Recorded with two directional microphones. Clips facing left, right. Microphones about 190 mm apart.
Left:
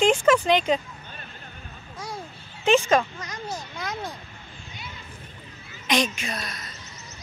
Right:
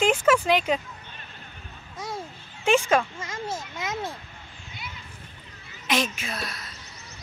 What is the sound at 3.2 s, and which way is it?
Children playing, 25° right (ahead or behind).